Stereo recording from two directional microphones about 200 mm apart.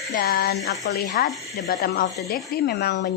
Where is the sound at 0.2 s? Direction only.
50° left (ahead or behind).